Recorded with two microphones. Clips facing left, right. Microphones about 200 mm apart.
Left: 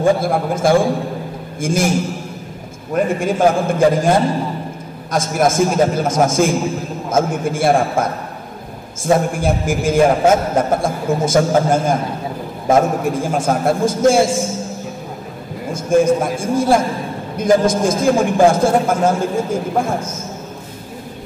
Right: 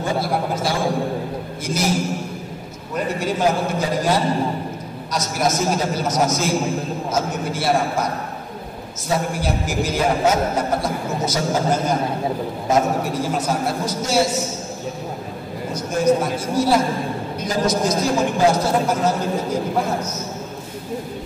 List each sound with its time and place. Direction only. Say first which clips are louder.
0.0 s a man's voice: left 6 dB; 50° left (ahead or behind)
16.3 s a man's voice: left 3 dB; 50° left (ahead or behind)